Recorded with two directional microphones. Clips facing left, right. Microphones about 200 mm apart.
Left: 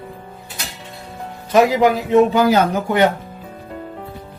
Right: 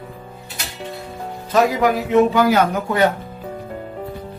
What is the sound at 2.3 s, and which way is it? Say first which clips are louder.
Speech: left 1 dB; 25° left (ahead or behind).